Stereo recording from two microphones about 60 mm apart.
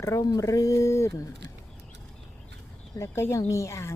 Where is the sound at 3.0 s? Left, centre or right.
Left.